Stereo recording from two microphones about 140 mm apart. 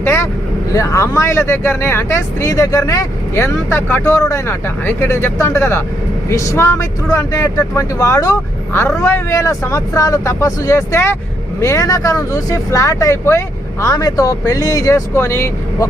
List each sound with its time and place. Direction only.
0.0 s vehicle: 20° left (ahead or behind)
0.7 s speech: 20° left (ahead or behind)